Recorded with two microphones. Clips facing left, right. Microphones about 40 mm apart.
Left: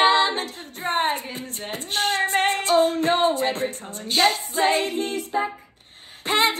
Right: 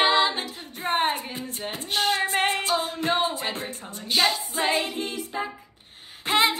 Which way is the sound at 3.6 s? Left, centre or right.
Left.